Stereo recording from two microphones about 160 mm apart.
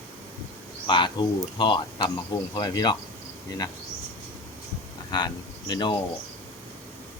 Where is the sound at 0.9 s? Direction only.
30° left (ahead or behind).